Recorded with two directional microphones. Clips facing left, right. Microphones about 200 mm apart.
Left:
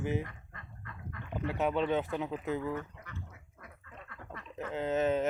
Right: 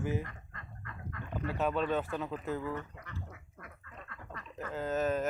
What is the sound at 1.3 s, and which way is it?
Speech, 15° left (ahead or behind).